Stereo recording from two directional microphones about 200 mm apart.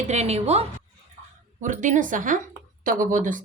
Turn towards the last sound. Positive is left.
turn(degrees=-40)  # may be behind; listen again after turning